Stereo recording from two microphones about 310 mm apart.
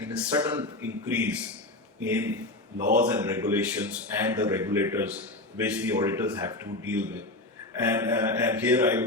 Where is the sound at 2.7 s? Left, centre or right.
Right.